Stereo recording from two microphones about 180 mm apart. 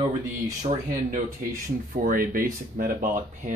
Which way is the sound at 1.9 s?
50° right (ahead or behind).